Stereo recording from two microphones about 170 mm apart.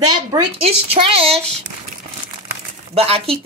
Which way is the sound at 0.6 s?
35° right (ahead or behind).